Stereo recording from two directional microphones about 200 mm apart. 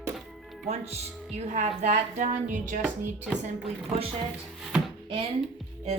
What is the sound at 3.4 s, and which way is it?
Speech, 30° right (ahead or behind).